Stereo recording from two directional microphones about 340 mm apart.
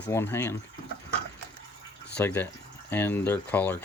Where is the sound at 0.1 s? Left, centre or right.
Centre.